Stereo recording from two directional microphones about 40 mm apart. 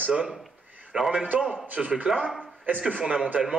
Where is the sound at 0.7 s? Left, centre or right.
Right.